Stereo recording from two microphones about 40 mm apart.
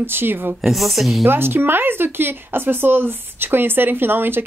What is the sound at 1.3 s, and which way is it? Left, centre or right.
Speech, right.